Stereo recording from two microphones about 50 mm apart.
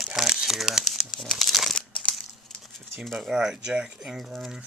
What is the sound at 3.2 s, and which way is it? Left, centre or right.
Speech, centre.